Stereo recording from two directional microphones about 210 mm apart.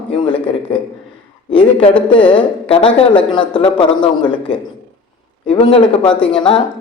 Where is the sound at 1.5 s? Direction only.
25° left (ahead or behind).